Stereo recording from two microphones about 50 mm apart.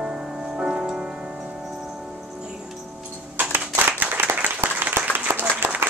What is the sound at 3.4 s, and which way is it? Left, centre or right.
Applause, right.